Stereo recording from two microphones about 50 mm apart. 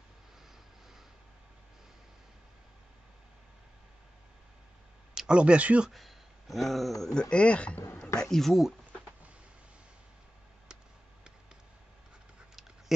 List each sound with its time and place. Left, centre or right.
5.1 s speech: centre
5.9 s speech: centre
7.2 s speech: left
8.0 s speech: centre